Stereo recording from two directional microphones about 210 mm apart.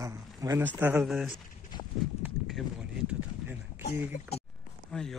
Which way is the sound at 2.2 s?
Centre (ahead or behind).